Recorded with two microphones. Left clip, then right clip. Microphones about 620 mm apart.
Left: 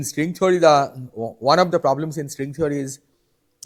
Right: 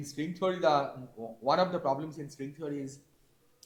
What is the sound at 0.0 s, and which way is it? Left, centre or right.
Speech, left.